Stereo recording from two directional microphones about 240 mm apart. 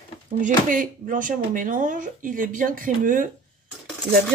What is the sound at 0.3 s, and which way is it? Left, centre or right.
Speech, right.